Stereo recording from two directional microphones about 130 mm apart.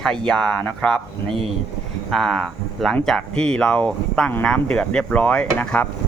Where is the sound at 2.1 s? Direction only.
5° left (ahead or behind).